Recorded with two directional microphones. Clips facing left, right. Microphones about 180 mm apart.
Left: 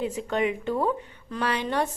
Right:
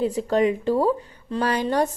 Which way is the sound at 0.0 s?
35° right (ahead or behind).